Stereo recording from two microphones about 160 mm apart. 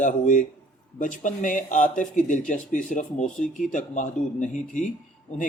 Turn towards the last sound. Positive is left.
turn(degrees=50)  # may be behind; listen again after turning